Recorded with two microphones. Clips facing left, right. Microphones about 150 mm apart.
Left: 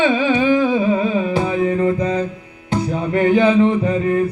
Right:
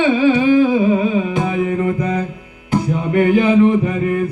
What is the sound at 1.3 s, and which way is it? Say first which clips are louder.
Music: left 1 dB; 30° left (ahead or behind).